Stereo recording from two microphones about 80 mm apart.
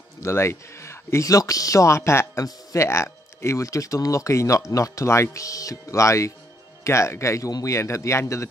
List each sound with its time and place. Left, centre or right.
0.2 s speech: left